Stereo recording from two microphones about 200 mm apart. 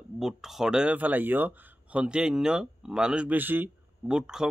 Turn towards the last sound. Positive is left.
turn(degrees=-5)  # may be behind; listen again after turning